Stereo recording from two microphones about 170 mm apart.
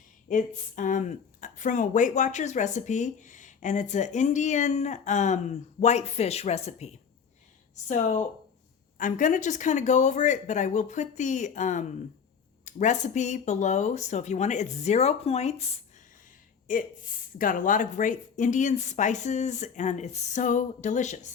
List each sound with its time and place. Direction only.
0.3 s speech: 50° left (ahead or behind)
16.6 s speech: 50° left (ahead or behind)